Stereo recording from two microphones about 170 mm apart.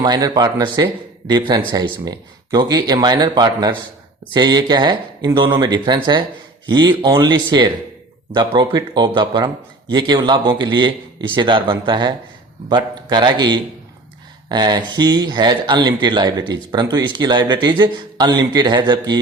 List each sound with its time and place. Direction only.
0.0 s a man's voice: 25° right (ahead or behind)